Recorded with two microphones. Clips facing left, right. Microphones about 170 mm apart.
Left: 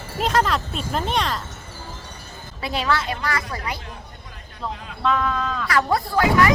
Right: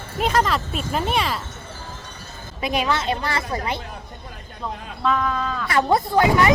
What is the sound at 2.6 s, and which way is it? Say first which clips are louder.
A woman's voice: right 1 dB; 15° right (ahead or behind).